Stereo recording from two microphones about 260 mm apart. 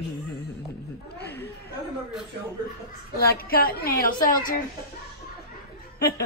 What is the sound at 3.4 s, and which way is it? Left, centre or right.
A woman's voice, left.